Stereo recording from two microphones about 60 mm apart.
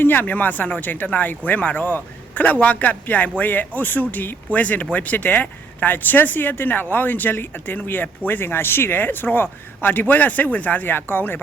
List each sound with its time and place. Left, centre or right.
0.0 s a man's voice: left